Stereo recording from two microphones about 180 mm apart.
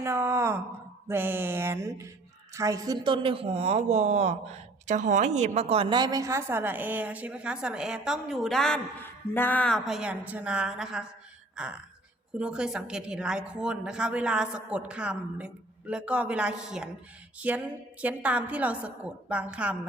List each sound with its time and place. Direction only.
0.0 s a woman's voice: 15° right (ahead or behind)
11.5 s sigh: 5° right (ahead or behind)
12.4 s a woman's voice: 5° right (ahead or behind)